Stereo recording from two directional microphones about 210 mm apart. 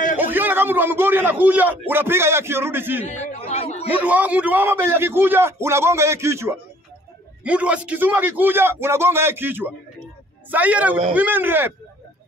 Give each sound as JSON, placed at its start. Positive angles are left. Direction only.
{"t": 0.2, "sound": "a man's voice", "side_deg": -10}
{"t": 3.1, "sound": "a sound", "side_deg": 35}
{"t": 4.0, "sound": "a man's voice", "side_deg": -5}